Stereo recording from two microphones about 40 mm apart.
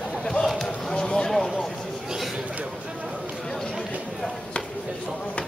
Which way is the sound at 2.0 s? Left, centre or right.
Centre.